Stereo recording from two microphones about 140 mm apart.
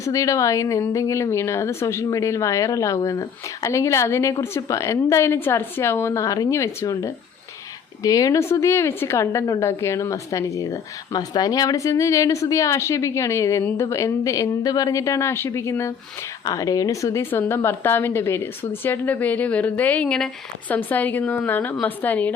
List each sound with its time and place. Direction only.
0.0 s a woman's voice: 25° left (ahead or behind)